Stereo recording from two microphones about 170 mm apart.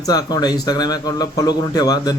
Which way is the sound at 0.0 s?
20° left (ahead or behind).